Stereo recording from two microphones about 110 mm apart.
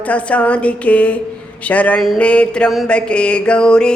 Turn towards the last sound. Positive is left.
turn(degrees=10)  # may be behind; listen again after turning